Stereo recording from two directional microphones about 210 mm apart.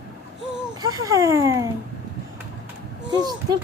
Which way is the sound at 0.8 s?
15° right (ahead or behind).